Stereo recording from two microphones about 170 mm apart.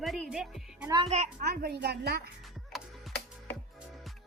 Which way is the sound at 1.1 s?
45° right (ahead or behind).